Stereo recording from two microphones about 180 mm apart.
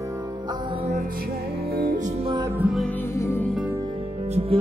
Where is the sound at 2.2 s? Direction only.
25° right (ahead or behind).